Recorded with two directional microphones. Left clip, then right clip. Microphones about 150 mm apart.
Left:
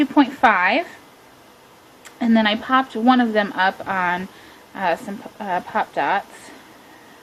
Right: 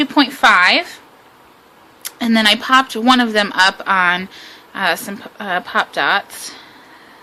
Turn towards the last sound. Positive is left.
turn(degrees=-35)  # may be behind; listen again after turning